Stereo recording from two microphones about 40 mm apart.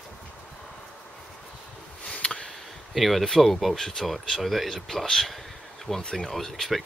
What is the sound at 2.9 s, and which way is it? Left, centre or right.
Speech, centre.